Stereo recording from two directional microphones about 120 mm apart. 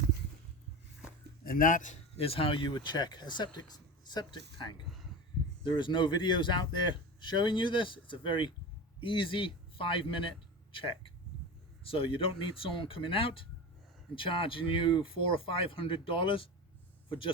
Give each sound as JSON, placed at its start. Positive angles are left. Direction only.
{"t": 1.7, "sound": "speech", "side_deg": 90}
{"t": 2.1, "sound": "a man's voice", "side_deg": 55}